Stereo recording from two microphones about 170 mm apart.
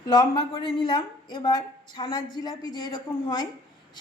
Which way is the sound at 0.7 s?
30° left (ahead or behind).